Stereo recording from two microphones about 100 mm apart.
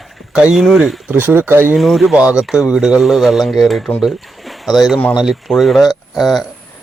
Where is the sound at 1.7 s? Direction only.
Centre (ahead or behind).